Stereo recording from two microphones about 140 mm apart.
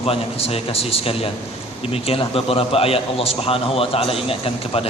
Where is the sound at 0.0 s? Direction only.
45° left (ahead or behind).